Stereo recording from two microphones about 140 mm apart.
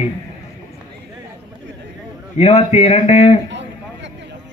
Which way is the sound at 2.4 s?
50° left (ahead or behind).